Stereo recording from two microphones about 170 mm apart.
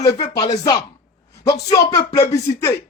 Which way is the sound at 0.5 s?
25° left (ahead or behind).